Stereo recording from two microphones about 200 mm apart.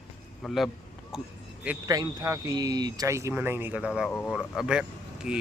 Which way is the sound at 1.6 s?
15° right (ahead or behind).